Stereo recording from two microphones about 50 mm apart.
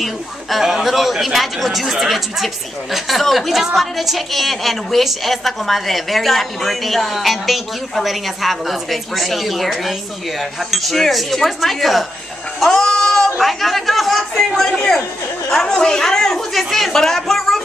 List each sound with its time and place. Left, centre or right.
0.0 s a man's voice: centre
12.5 s a sound: centre
13.4 s a man's voice: centre